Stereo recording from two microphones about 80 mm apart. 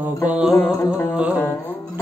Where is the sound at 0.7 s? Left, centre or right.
Left.